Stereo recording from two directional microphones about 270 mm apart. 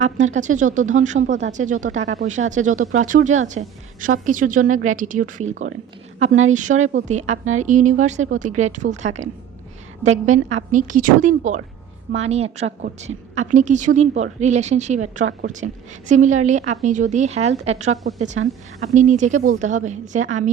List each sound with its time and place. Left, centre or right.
0.2 s a woman's voice: right